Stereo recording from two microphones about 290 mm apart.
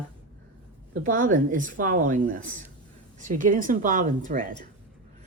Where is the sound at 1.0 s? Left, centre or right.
Right.